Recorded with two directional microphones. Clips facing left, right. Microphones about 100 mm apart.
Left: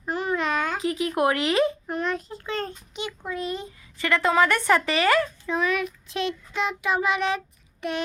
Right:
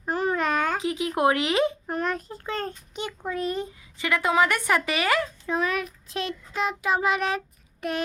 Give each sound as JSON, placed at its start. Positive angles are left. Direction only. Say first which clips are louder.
{"t": 0.1, "sound": "babbling", "louder": "right 1 dB", "side_deg": -40}
{"t": 0.8, "sound": "speech", "louder": "even", "side_deg": -20}
{"t": 1.9, "sound": "a child's voice", "louder": "even", "side_deg": -45}
{"t": 3.9, "sound": "speech", "louder": "left 1 dB", "side_deg": -15}
{"t": 5.5, "sound": "child singing", "louder": "left 1 dB", "side_deg": -40}